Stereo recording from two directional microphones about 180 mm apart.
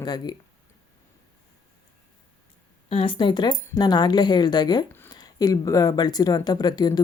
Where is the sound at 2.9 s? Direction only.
30° left (ahead or behind).